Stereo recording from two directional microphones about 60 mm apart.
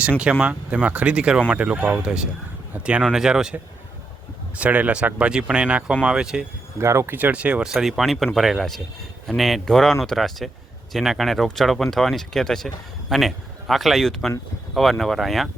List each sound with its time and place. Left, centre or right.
0.2 s speech: centre
4.5 s speech: right
6.7 s speech: right
7.1 s speech: right
7.6 s speech: centre